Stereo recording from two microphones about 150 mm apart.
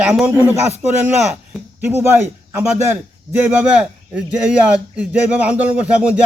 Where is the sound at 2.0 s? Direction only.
15° right (ahead or behind).